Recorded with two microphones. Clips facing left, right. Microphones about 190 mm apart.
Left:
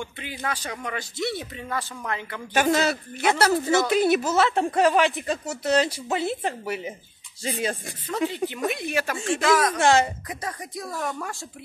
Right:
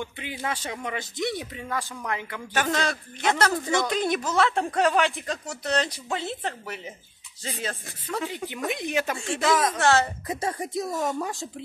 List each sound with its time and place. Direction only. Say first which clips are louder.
0.0 s speech: even; 20° right (ahead or behind)
2.5 s a woman's voice: left 5 dB; 10° left (ahead or behind)
8.6 s speech: right 2 dB; 20° right (ahead or behind)
9.8 s a woman's voice: left 3 dB; 15° left (ahead or behind)
10.2 s speech: right 5 dB; 25° right (ahead or behind)